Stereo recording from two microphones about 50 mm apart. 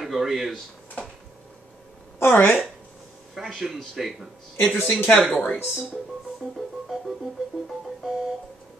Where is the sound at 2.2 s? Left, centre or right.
Left.